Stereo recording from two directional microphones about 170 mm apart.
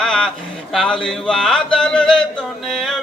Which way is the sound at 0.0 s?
5° left (ahead or behind).